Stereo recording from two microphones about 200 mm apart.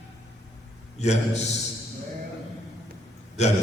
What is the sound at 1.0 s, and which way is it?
Speech, 35° left (ahead or behind).